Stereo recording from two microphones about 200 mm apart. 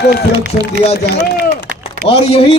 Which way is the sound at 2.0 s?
30° left (ahead or behind).